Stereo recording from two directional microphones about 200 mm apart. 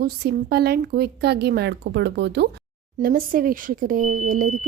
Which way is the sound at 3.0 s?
45° right (ahead or behind).